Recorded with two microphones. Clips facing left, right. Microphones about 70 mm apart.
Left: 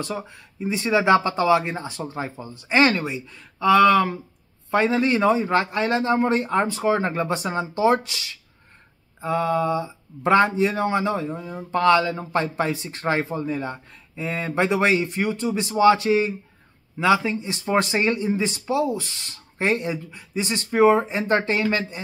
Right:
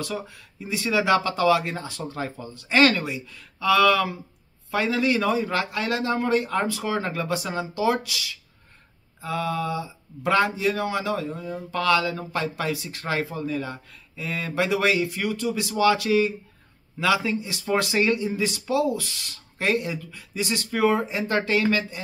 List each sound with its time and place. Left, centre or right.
0.0 s speech: left